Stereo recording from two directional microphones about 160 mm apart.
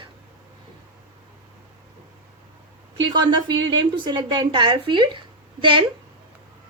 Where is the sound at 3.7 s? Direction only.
30° right (ahead or behind).